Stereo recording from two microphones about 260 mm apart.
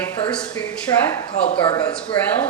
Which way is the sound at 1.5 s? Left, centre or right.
Left.